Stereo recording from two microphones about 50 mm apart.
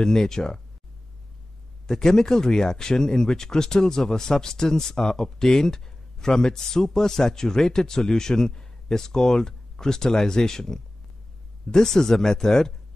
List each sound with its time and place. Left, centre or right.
0.0 s speech: centre
1.9 s speech: centre